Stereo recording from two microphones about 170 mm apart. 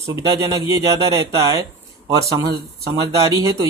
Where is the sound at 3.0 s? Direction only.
20° right (ahead or behind).